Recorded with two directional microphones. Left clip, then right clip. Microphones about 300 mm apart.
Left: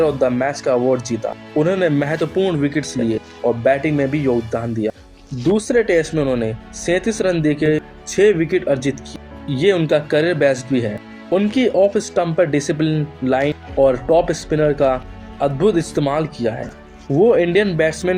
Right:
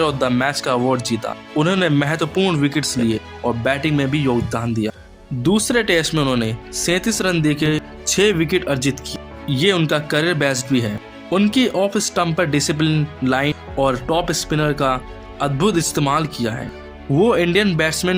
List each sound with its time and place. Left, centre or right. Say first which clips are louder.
0.0 s speech: left 2 dB; right